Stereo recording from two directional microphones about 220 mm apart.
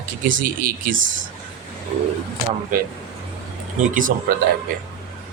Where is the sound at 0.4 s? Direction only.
40° right (ahead or behind).